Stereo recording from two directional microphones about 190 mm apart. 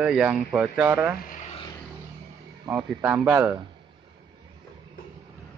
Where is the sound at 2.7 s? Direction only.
5° right (ahead or behind).